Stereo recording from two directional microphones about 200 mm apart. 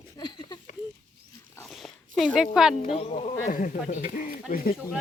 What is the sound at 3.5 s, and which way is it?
Speech, 45° left (ahead or behind).